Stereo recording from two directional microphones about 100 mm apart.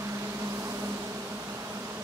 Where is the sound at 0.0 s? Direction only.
30° right (ahead or behind).